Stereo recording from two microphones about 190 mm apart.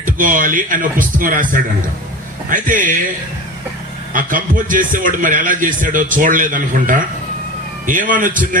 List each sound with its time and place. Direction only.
0.0 s a man's voice: 45° right (ahead or behind)
4.1 s a man's voice: 45° right (ahead or behind)